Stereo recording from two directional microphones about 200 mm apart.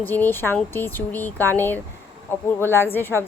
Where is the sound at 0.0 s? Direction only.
10° left (ahead or behind).